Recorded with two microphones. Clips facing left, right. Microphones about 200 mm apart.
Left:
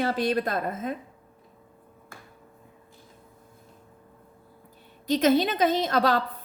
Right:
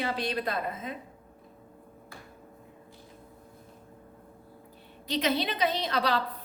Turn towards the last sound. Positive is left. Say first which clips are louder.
# left 6 dB
turn(degrees=45)  # may be behind; listen again after turning